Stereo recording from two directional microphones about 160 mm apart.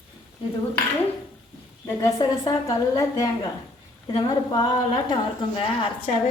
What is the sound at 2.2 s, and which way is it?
A woman's voice, 25° left (ahead or behind).